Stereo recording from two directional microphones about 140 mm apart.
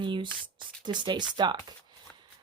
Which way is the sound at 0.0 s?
35° right (ahead or behind).